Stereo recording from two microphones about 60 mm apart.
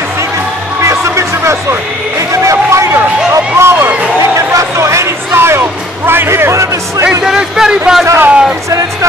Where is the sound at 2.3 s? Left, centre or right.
Right.